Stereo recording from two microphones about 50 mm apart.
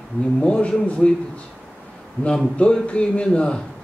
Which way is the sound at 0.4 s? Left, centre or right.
Left.